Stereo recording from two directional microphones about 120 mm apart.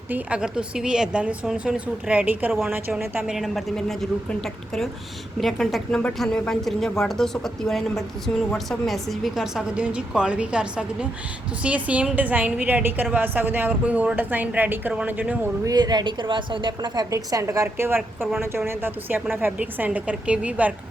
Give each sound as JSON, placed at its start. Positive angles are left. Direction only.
{"t": 0.1, "sound": "a woman's voice", "side_deg": -10}
{"t": 3.2, "sound": "a woman's voice", "side_deg": 0}
{"t": 15.6, "sound": "a woman's voice", "side_deg": -35}